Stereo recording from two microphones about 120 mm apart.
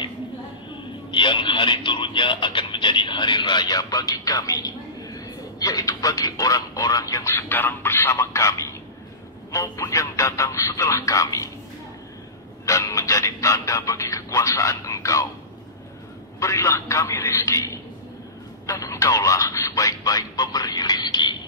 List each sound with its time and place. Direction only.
0.7 s speech: 40° left (ahead or behind)
12.6 s speech: 25° left (ahead or behind)
16.3 s speech: 25° left (ahead or behind)
18.7 s speech: 25° left (ahead or behind)